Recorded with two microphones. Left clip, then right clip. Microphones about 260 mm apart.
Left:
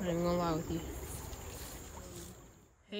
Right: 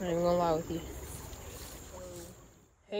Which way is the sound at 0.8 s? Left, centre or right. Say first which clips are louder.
Right 1 dB; left.